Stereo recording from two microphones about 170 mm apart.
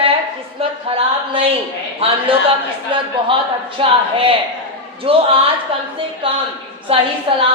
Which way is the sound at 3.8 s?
30° right (ahead or behind).